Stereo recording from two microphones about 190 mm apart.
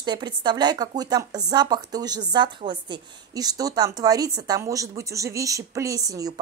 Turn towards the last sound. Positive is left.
turn(degrees=-20)  # may be behind; listen again after turning